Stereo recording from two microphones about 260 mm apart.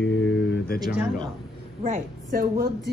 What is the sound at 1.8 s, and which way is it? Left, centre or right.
A woman's voice, right.